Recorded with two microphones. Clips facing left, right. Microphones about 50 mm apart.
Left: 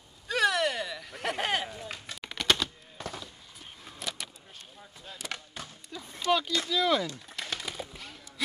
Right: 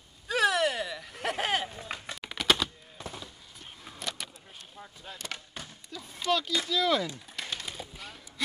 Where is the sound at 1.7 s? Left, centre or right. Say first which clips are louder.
Right 2 dB; centre.